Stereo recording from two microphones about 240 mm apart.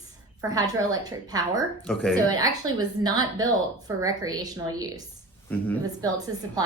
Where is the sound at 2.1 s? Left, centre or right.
Centre.